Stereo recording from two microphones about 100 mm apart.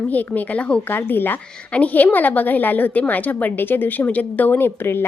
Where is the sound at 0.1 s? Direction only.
15° left (ahead or behind).